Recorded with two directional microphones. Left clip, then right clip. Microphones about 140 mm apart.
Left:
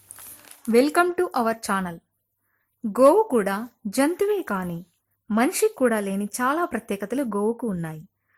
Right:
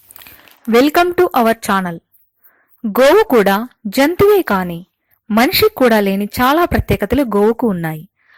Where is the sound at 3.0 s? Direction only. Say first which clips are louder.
Right 8 dB; 40° right (ahead or behind).